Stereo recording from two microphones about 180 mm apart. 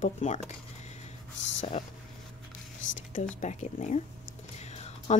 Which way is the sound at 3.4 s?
40° left (ahead or behind).